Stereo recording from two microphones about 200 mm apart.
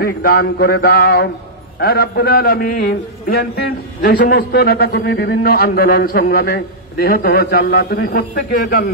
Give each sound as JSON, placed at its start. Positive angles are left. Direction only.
{"t": 0.0, "sound": "a man's voice", "side_deg": 50}